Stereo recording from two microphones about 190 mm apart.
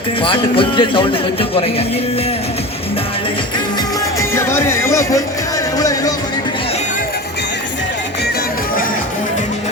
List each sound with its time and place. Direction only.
0.2 s speech: 25° left (ahead or behind)
4.2 s music: 15° left (ahead or behind)
5.7 s speech: 20° left (ahead or behind)